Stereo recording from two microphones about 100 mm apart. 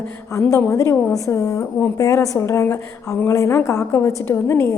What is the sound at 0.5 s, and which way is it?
A woman's voice, 30° left (ahead or behind).